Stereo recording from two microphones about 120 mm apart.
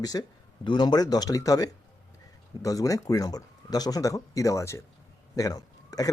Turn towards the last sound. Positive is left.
turn(degrees=30)  # may be behind; listen again after turning